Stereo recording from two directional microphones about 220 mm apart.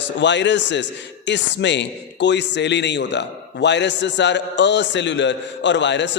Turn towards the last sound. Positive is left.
turn(degrees=55)  # may be behind; listen again after turning